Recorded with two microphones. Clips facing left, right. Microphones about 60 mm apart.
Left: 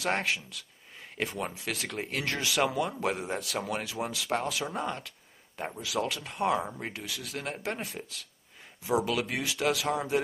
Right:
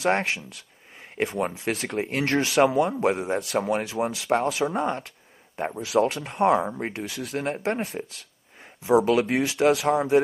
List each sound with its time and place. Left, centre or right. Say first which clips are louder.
0.0 s speech: right 6 dB; right